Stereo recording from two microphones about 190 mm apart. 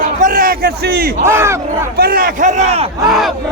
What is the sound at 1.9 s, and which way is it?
Speech, 50° right (ahead or behind).